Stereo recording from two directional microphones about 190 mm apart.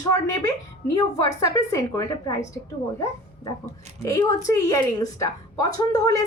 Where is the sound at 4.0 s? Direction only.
20° left (ahead or behind).